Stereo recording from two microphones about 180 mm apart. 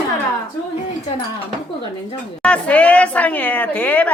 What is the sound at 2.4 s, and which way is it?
A woman's voice, 5° left (ahead or behind).